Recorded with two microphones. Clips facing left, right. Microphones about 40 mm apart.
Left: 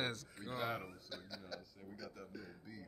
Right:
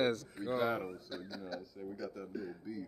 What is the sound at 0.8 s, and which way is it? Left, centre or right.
Speech, right.